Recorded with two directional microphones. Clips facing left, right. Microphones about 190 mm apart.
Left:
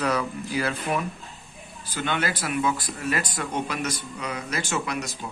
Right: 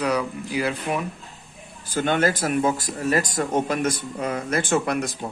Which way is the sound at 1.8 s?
50° right (ahead or behind).